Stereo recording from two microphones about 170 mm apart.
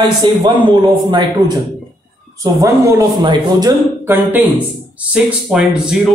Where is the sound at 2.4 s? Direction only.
20° right (ahead or behind).